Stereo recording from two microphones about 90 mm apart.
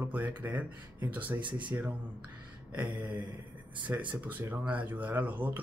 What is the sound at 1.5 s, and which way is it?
Speech, 60° right (ahead or behind).